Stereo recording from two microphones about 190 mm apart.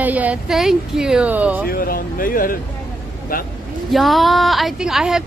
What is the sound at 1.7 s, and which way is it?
Speech, 50° left (ahead or behind).